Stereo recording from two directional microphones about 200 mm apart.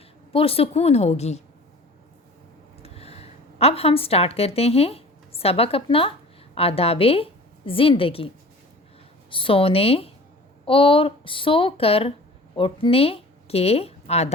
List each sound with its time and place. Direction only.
0.3 s a woman's voice: 30° left (ahead or behind)
2.8 s a woman's voice: 30° left (ahead or behind)
9.3 s speech: 25° left (ahead or behind)